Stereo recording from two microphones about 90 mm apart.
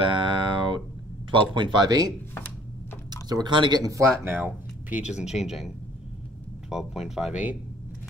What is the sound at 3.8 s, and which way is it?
Speech, 35° right (ahead or behind).